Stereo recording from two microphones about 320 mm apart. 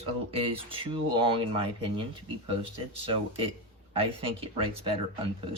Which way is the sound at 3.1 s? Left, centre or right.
Centre.